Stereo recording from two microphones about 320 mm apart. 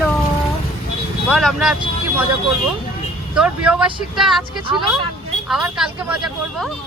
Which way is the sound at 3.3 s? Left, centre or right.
Centre.